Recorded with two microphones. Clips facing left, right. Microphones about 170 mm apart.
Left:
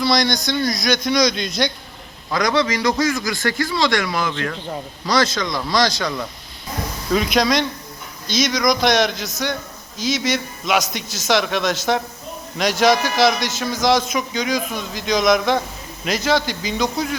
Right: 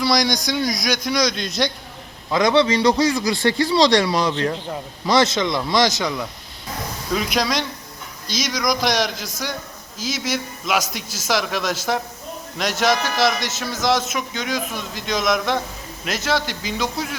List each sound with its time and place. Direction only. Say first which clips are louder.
0.0 s speech: left 1 dB; 10° right (ahead or behind)
2.3 s a man's voice: right 3 dB; 25° right (ahead or behind)
7.1 s a man's voice: left 4 dB; 5° right (ahead or behind)